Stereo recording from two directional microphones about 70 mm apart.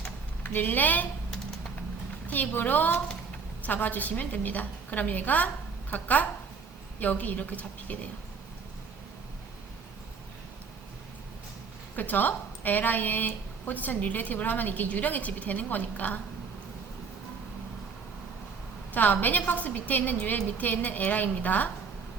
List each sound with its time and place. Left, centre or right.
0.4 s speech: left
2.2 s speech: left
11.9 s speech: left
18.9 s speech: left